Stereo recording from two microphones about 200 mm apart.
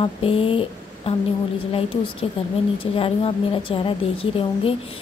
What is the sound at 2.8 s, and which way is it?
A woman's voice, 30° left (ahead or behind).